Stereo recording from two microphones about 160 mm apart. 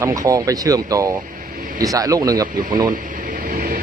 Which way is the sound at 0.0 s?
20° right (ahead or behind).